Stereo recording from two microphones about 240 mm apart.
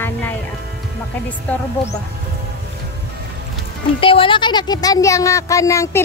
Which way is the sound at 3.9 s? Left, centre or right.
Left.